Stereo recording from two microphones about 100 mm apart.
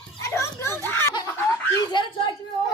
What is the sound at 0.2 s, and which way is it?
Children playing, 30° left (ahead or behind).